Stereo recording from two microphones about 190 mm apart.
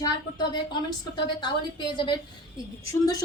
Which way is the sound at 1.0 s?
25° left (ahead or behind).